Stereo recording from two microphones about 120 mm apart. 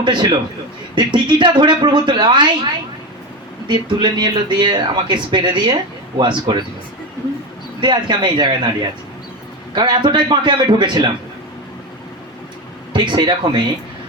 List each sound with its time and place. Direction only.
0.0 s speech: 40° right (ahead or behind)
3.7 s speech: 40° right (ahead or behind)
7.8 s speech: 40° right (ahead or behind)
9.7 s speech: 40° right (ahead or behind)
12.9 s speech: 40° right (ahead or behind)